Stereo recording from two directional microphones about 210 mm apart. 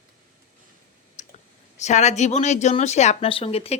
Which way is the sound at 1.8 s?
35° left (ahead or behind).